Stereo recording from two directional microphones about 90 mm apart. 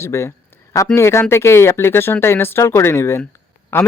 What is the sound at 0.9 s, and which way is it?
A man's voice, 30° left (ahead or behind).